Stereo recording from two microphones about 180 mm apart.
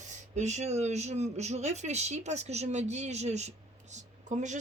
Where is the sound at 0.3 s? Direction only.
40° right (ahead or behind).